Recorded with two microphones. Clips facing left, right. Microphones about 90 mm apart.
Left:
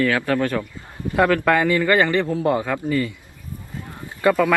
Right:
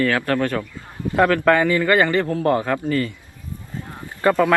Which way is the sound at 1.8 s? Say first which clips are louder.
Right 1 dB; 15° right (ahead or behind).